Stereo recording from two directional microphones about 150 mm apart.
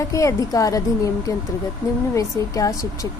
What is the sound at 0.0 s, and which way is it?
A woman's voice, 20° left (ahead or behind).